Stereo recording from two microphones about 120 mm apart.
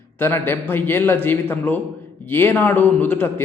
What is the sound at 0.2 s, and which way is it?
A man's voice, 20° left (ahead or behind).